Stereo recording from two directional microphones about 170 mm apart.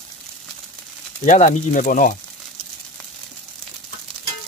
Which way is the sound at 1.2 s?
45° left (ahead or behind).